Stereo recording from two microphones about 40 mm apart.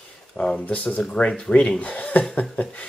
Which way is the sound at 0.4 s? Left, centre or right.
Left.